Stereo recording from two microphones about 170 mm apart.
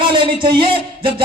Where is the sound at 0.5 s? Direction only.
30° right (ahead or behind).